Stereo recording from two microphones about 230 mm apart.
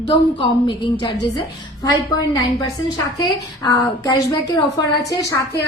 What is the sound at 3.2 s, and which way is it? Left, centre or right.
A woman's voice, centre.